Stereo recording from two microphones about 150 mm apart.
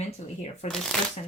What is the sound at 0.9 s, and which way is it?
Speech, 5° left (ahead or behind).